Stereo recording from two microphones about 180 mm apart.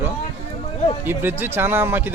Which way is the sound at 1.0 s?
10° right (ahead or behind).